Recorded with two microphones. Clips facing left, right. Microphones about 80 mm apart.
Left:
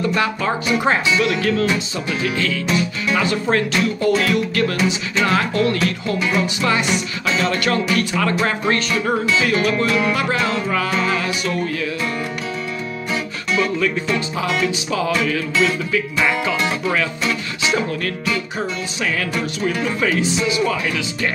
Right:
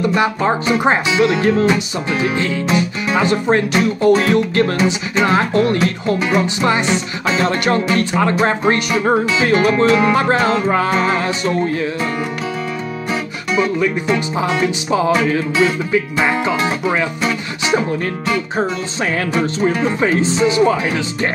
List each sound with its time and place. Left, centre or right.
0.0 s speech: right
9.0 s music: right
13.1 s speech: centre
19.3 s music: right